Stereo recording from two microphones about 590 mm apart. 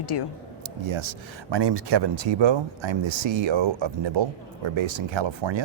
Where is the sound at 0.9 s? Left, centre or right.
Right.